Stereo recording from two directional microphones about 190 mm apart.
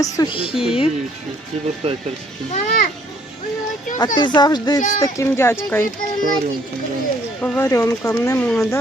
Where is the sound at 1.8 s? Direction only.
30° right (ahead or behind).